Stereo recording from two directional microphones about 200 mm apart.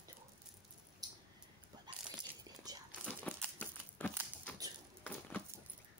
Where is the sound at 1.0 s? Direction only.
20° right (ahead or behind).